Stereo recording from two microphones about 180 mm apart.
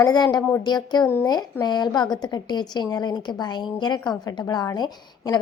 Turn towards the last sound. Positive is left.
turn(degrees=25)  # may be behind; listen again after turning